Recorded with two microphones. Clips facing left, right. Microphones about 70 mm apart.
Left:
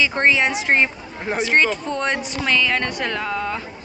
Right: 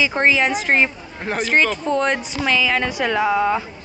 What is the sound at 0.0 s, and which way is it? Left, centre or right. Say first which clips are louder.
Speech: right 1 dB; centre.